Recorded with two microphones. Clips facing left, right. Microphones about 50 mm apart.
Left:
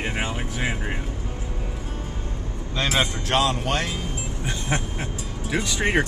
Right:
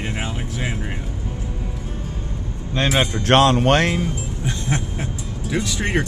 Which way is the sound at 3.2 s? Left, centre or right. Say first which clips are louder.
Right 8 dB; right.